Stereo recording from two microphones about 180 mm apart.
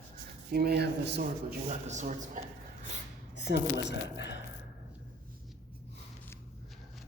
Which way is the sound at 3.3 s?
75° left (ahead or behind).